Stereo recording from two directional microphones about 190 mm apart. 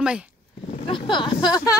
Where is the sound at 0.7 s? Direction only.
25° left (ahead or behind).